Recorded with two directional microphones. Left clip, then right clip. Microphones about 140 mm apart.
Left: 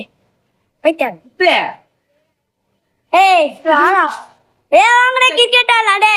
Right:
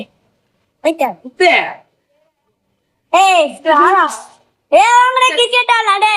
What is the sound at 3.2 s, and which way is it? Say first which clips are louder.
A woman's voice: left 1 dB; 15° left (ahead or behind).